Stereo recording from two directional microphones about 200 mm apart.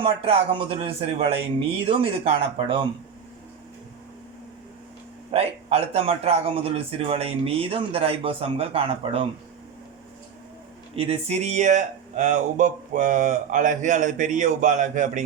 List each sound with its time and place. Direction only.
0.0 s a man's voice: 30° right (ahead or behind)
5.3 s a man's voice: 30° right (ahead or behind)
10.9 s speech: 30° right (ahead or behind)